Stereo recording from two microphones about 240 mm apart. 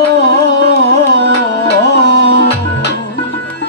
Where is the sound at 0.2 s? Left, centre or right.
Left.